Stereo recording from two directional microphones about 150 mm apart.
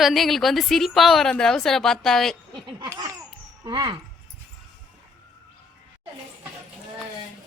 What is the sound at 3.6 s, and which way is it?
Speech, 30° right (ahead or behind).